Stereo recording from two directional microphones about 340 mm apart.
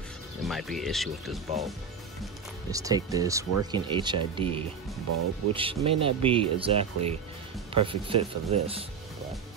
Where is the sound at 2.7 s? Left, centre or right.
Centre.